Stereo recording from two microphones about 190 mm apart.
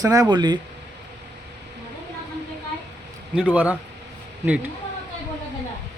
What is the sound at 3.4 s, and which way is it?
Speech, 5° right (ahead or behind).